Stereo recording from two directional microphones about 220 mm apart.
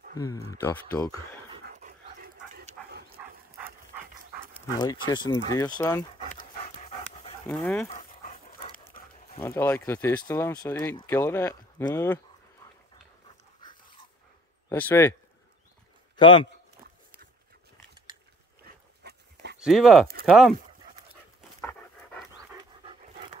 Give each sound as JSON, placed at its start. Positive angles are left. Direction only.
{"t": 0.1, "sound": "speech", "side_deg": 15}
{"t": 1.6, "sound": "dog", "side_deg": -35}
{"t": 4.7, "sound": "speech", "side_deg": 20}
{"t": 6.3, "sound": "dog", "side_deg": 25}
{"t": 7.4, "sound": "speech", "side_deg": 0}
{"t": 7.9, "sound": "dog", "side_deg": 35}
{"t": 9.3, "sound": "speech", "side_deg": 15}
{"t": 13.6, "sound": "dog", "side_deg": 20}
{"t": 14.7, "sound": "speech", "side_deg": 10}
{"t": 16.2, "sound": "speech", "side_deg": 20}
{"t": 19.0, "sound": "dog", "side_deg": -50}
{"t": 19.6, "sound": "speech", "side_deg": 0}
{"t": 21.5, "sound": "pant", "side_deg": 10}